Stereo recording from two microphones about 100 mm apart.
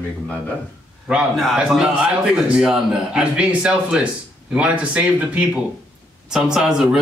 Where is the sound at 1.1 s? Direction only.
5° right (ahead or behind).